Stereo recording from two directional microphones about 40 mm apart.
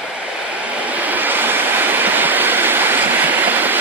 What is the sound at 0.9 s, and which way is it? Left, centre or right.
Vehicle, right.